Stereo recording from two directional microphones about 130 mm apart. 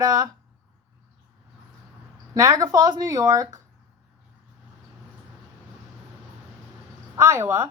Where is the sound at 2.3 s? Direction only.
25° right (ahead or behind).